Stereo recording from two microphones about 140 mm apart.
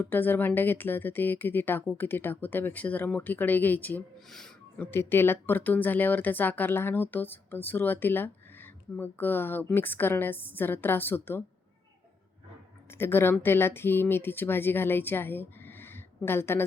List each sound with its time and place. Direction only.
0.0 s speech: 15° left (ahead or behind)
4.8 s speech: 15° left (ahead or behind)
12.9 s speech: 15° left (ahead or behind)